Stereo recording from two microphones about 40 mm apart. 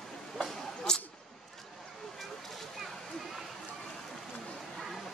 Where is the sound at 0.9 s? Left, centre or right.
Centre.